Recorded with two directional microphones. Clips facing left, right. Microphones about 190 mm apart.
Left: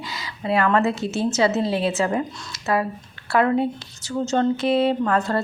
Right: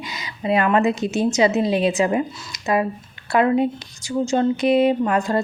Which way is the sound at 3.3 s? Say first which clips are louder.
Right 2 dB; 15° right (ahead or behind).